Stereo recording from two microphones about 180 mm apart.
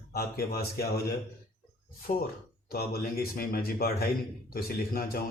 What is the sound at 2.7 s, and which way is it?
Speech, 55° left (ahead or behind).